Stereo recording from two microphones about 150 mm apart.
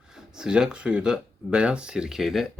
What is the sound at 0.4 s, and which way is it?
Speech, 5° right (ahead or behind).